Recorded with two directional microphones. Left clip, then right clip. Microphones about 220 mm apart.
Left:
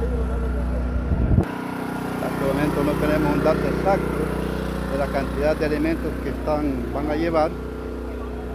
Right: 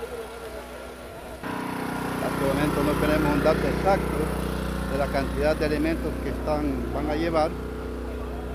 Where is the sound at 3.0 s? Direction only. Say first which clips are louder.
Left 2 dB; 20° right (ahead or behind).